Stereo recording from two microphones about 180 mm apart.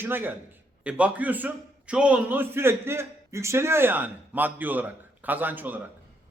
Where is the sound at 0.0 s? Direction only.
10° right (ahead or behind).